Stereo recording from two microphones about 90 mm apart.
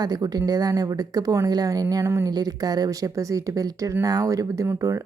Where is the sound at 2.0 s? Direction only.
30° right (ahead or behind).